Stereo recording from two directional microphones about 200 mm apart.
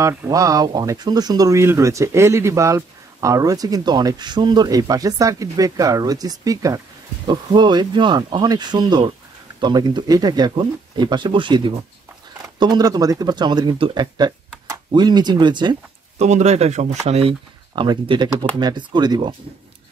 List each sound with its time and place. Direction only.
0.0 s speech: 15° right (ahead or behind)
16.2 s speech: 35° right (ahead or behind)